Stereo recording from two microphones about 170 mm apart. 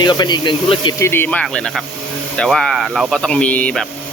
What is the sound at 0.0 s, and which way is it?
Speech, 25° left (ahead or behind).